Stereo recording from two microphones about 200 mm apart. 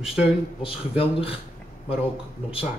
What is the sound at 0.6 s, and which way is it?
Speech, 30° left (ahead or behind).